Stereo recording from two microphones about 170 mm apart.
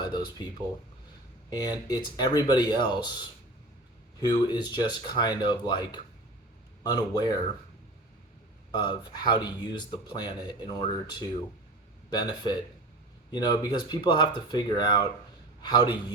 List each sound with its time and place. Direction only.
1.5 s speech: 25° left (ahead or behind)
8.7 s speech: 25° left (ahead or behind)